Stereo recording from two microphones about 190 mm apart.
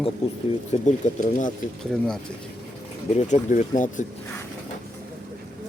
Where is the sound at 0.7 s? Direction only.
35° left (ahead or behind).